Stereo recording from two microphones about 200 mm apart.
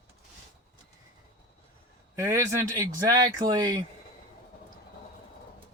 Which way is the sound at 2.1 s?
15° right (ahead or behind).